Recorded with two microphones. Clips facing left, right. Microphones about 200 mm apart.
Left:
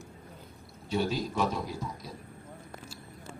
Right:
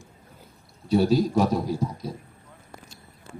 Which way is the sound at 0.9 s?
35° right (ahead or behind).